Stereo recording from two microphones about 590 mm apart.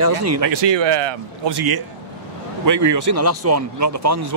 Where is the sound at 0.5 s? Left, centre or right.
Right.